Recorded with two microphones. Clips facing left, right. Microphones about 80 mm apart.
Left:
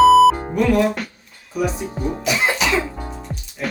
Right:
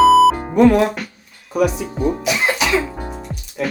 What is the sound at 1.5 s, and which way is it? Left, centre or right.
Speech, right.